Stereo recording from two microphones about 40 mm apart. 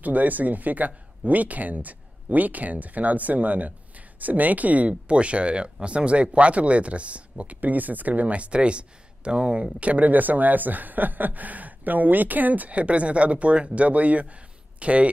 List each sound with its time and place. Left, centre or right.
0.0 s speech: right